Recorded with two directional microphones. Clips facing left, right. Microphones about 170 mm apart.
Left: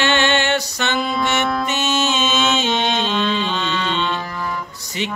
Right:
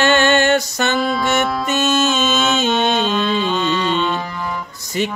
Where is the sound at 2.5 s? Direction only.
45° right (ahead or behind).